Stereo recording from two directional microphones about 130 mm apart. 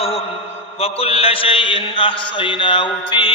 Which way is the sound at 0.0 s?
50° left (ahead or behind).